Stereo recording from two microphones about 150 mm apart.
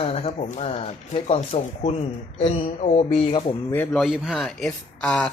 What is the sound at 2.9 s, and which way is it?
Speech, 40° left (ahead or behind).